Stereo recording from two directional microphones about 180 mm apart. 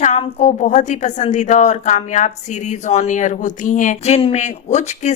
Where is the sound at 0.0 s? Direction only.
40° left (ahead or behind).